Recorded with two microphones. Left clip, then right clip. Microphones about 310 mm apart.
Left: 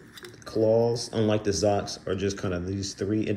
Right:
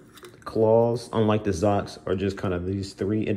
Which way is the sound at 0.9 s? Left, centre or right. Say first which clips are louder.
Right 2 dB; centre.